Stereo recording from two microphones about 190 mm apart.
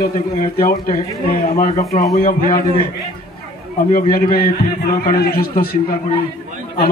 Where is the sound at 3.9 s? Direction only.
50° left (ahead or behind).